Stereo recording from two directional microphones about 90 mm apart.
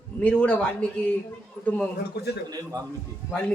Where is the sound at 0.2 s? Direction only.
15° left (ahead or behind).